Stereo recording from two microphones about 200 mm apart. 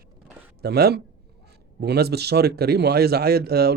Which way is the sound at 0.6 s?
55° right (ahead or behind).